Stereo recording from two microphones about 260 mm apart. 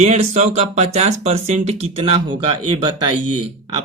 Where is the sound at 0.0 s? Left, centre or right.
Right.